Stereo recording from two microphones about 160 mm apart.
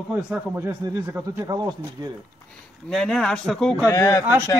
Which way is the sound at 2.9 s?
5° left (ahead or behind).